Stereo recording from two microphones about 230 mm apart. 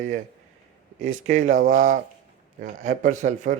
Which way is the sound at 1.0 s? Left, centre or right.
Right.